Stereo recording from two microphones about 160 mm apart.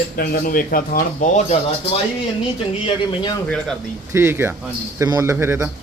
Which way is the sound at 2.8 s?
25° left (ahead or behind).